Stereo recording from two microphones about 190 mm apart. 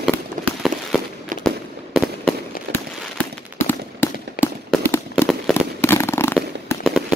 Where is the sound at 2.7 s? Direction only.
60° right (ahead or behind).